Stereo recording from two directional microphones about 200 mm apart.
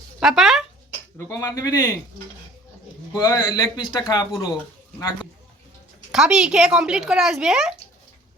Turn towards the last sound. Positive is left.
turn(degrees=0)  # may be behind; listen again after turning